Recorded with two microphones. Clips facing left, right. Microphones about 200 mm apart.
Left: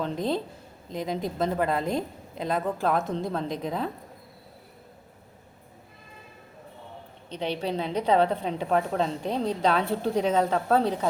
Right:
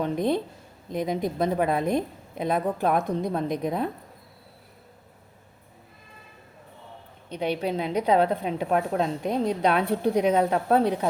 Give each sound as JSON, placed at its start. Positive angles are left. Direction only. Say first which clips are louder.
{"t": 0.0, "sound": "a woman's voice", "louder": "right 3 dB", "side_deg": -20}
{"t": 7.3, "sound": "a woman's voice", "louder": "right 3 dB", "side_deg": -10}